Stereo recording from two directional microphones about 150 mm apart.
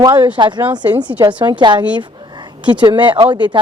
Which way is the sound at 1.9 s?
30° right (ahead or behind).